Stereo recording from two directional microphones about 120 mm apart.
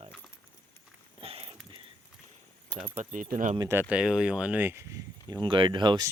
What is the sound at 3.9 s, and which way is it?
Speech, 5° right (ahead or behind).